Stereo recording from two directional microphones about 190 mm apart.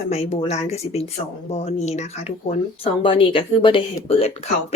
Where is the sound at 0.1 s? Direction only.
35° left (ahead or behind).